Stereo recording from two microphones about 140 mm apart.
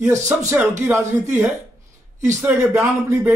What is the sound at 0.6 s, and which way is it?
Speech, 15° right (ahead or behind).